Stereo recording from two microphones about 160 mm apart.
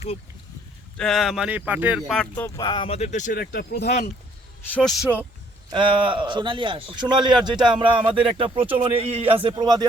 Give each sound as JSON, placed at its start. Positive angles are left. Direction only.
{"t": 0.9, "sound": "speech", "side_deg": 0}
{"t": 2.1, "sound": "speech", "side_deg": 15}
{"t": 2.6, "sound": "speech", "side_deg": 30}
{"t": 3.4, "sound": "speech", "side_deg": 80}
{"t": 4.7, "sound": "speech", "side_deg": 0}
{"t": 5.7, "sound": "speech", "side_deg": -30}